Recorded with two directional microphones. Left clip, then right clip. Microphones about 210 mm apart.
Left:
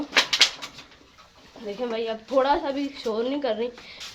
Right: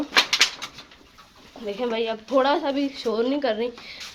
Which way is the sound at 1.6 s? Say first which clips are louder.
Right 3 dB; 20° right (ahead or behind).